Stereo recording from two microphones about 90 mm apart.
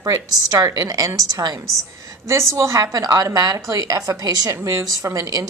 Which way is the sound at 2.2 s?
30° right (ahead or behind).